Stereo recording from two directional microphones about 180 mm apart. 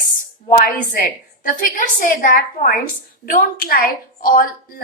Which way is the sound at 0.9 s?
50° left (ahead or behind).